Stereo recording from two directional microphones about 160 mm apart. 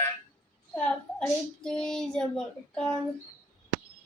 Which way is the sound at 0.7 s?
5° left (ahead or behind).